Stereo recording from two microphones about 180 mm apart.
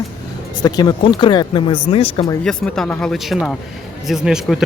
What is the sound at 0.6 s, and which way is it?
Speech, 20° left (ahead or behind).